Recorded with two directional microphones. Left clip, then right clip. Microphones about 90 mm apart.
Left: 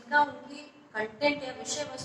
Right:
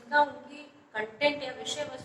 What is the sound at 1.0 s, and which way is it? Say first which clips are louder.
Speech: even; 25° left (ahead or behind).